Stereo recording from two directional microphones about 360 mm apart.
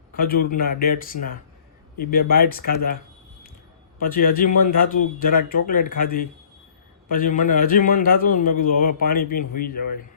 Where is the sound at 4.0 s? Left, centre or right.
Left.